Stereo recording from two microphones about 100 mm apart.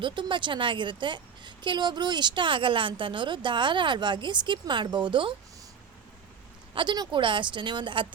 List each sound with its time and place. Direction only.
0.0 s a woman's voice: 55° right (ahead or behind)
6.7 s a woman's voice: 45° right (ahead or behind)